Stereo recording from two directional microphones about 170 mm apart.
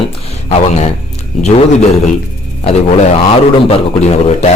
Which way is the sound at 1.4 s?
40° left (ahead or behind).